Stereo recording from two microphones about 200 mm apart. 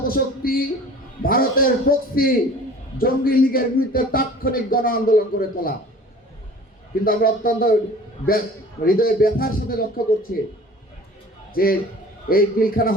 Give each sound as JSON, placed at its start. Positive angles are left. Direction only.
{"t": 0.0, "sound": "speech", "side_deg": 45}
{"t": 7.0, "sound": "speech", "side_deg": 45}
{"t": 8.8, "sound": "speech", "side_deg": 45}
{"t": 11.5, "sound": "speech", "side_deg": 45}